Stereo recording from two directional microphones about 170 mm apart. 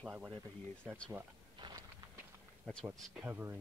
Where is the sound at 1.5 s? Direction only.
25° right (ahead or behind).